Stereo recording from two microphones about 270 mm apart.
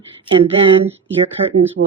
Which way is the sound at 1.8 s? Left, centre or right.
Right.